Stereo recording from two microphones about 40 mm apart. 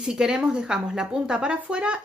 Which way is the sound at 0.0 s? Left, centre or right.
Centre.